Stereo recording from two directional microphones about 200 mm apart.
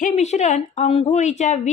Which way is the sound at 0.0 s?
35° left (ahead or behind).